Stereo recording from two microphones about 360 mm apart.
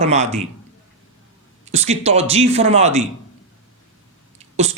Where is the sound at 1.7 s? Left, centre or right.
Centre.